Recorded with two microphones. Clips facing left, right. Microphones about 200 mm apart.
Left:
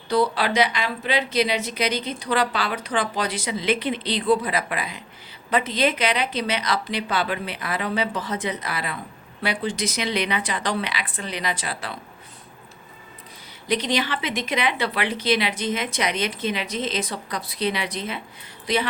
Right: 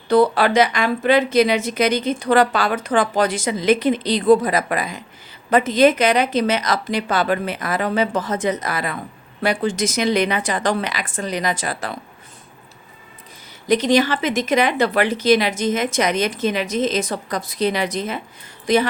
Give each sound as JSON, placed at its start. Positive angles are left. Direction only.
{"t": 0.1, "sound": "a woman's voice", "side_deg": -50}
{"t": 13.7, "sound": "a woman's voice", "side_deg": -45}